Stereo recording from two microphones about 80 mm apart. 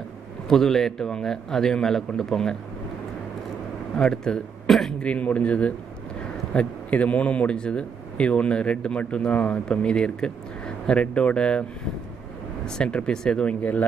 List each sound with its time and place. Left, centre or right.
0.5 s a man's voice: centre
3.9 s a man's voice: centre
5.0 s a man's voice: centre
12.6 s a man's voice: centre